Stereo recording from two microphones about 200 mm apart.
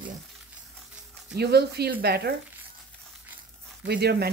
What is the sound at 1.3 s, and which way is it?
Speech, 55° right (ahead or behind).